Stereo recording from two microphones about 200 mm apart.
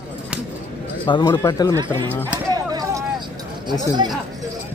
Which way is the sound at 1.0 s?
25° left (ahead or behind).